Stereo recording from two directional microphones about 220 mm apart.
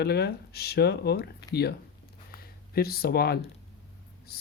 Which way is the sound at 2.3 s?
45° left (ahead or behind).